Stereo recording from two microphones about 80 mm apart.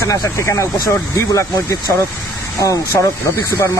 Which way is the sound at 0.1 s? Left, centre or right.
Left.